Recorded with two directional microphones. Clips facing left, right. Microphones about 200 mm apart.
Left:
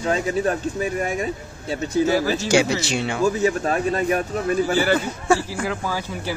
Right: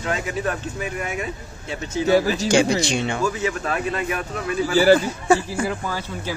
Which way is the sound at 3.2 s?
40° left (ahead or behind).